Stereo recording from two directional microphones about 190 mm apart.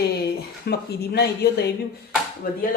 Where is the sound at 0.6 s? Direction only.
60° left (ahead or behind).